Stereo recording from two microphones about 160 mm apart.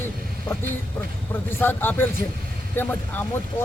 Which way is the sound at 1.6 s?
15° left (ahead or behind).